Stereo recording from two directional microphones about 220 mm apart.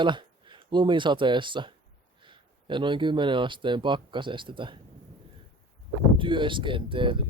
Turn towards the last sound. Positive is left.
turn(degrees=-20)  # may be behind; listen again after turning